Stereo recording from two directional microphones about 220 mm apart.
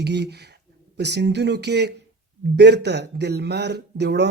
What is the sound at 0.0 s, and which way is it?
Speech, 50° right (ahead or behind).